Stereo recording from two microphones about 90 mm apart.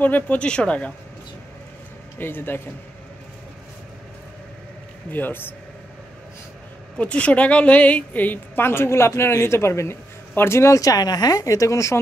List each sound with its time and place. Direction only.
0.0 s speech: 20° left (ahead or behind)
2.1 s a woman's voice: 25° left (ahead or behind)
5.1 s a woman's voice: 20° left (ahead or behind)
7.0 s a woman's voice: 15° left (ahead or behind); by 12.0 s 35° left (ahead or behind)